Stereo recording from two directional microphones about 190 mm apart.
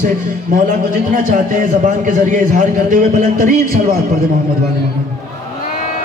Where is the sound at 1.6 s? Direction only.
45° right (ahead or behind).